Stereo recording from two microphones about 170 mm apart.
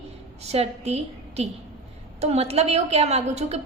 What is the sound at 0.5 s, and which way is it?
A woman's voice, 40° right (ahead or behind).